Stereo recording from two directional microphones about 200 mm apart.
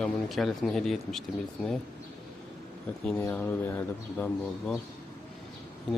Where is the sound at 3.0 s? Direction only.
10° left (ahead or behind).